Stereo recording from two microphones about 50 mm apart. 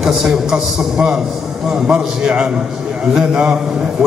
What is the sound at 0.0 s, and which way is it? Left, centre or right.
A man's voice, centre.